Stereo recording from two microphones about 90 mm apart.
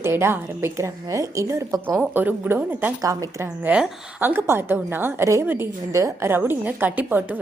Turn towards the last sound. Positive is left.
turn(degrees=-20)  # may be behind; listen again after turning